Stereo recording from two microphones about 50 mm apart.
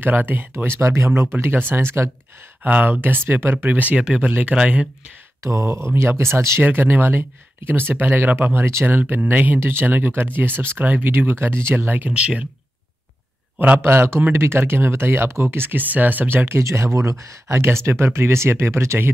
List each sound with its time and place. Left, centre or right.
0.0 s speech: right
0.7 s speech: right
1.3 s speech: right
2.6 s speech: right
3.6 s speech: right
5.4 s speech: right
6.6 s speech: right
9.6 s speech: right
11.7 s speech: right
12.1 s speech: right
13.7 s speech: right
15.7 s speech: right
16.4 s speech: right
17.6 s speech: right